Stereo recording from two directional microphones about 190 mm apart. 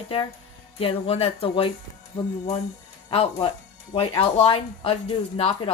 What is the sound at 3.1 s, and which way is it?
A woman's voice, 30° left (ahead or behind).